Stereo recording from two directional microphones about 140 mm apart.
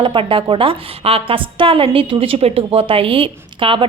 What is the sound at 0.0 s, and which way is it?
A woman's voice, 35° right (ahead or behind).